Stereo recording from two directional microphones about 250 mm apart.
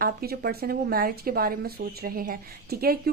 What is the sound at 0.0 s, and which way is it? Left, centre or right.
A woman's voice, right.